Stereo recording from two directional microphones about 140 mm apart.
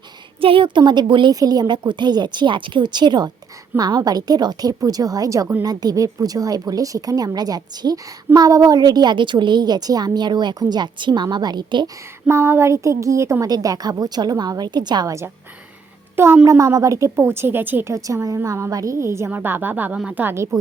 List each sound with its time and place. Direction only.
0.4 s a woman's voice: 40° right (ahead or behind)
12.3 s a woman's voice: 15° right (ahead or behind)